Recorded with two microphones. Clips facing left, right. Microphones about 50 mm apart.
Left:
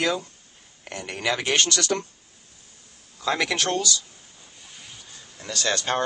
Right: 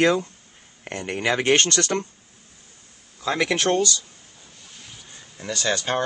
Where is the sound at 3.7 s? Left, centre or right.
Right.